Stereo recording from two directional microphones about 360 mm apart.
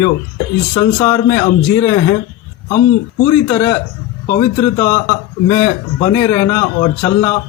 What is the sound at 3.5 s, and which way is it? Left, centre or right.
A man's voice, centre.